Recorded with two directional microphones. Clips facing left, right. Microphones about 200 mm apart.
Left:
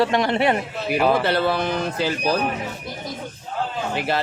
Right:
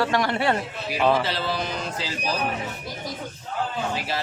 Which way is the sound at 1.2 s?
60° left (ahead or behind).